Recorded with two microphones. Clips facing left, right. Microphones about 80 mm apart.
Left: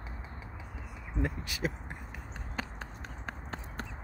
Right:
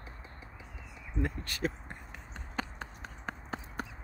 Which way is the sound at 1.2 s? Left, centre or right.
Centre.